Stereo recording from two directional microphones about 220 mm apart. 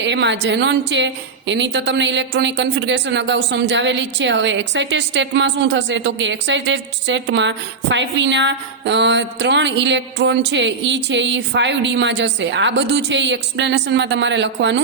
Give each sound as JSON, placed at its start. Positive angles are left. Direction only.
{"t": 0.0, "sound": "a woman's voice", "side_deg": -55}